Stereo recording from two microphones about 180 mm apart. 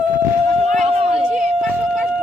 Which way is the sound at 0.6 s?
35° right (ahead or behind).